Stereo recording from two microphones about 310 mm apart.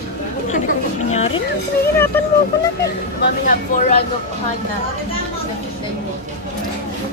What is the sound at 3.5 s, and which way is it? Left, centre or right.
Speech, left.